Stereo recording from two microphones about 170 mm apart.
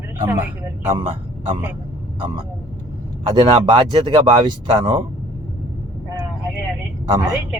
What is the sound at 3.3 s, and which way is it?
Speech, 30° right (ahead or behind).